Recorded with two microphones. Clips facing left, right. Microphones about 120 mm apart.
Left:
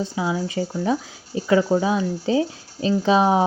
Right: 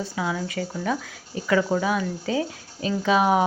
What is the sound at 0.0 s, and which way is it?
Speech, 25° left (ahead or behind).